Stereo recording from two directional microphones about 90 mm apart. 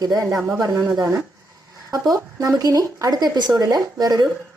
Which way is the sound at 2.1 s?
40° right (ahead or behind).